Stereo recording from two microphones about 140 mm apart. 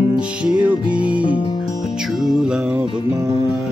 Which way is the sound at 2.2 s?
5° right (ahead or behind).